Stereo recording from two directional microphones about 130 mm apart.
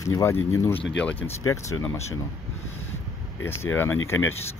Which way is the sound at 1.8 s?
20° left (ahead or behind).